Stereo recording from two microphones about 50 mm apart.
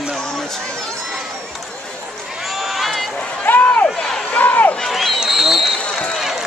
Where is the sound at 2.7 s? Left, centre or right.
Centre.